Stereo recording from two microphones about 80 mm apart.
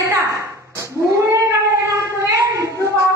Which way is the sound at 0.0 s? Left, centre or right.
Right.